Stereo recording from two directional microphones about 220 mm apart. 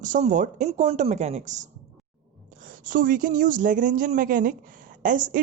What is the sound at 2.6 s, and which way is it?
Speech, 35° right (ahead or behind).